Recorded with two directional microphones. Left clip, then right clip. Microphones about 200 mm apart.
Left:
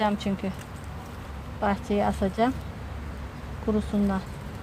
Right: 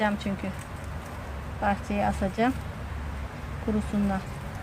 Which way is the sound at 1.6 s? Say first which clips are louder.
Left 1 dB; 40° left (ahead or behind).